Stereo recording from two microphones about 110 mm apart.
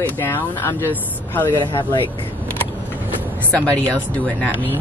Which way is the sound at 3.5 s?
15° left (ahead or behind).